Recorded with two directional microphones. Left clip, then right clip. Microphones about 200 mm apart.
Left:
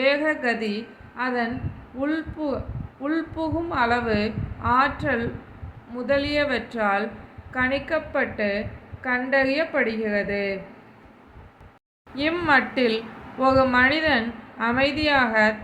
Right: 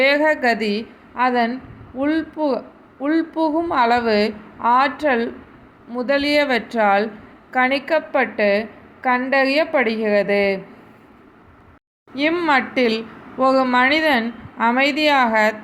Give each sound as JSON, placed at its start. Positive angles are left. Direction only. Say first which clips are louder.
{"t": 0.0, "sound": "a woman's voice", "louder": "right 6 dB", "side_deg": -30}
{"t": 12.1, "sound": "speech", "louder": "right 3 dB", "side_deg": -25}